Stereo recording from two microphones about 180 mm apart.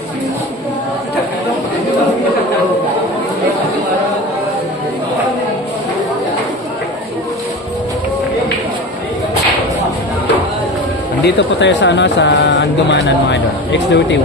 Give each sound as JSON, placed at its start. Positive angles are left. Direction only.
{"t": 11.2, "sound": "speech", "side_deg": 75}